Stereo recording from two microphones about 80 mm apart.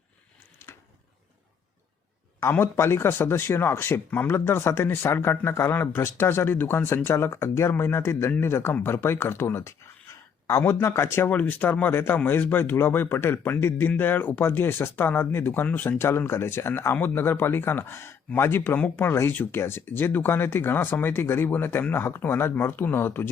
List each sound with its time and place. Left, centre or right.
2.4 s speech: left
11.3 s speech: left